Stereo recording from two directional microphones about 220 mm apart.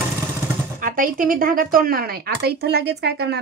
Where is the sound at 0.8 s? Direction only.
40° right (ahead or behind).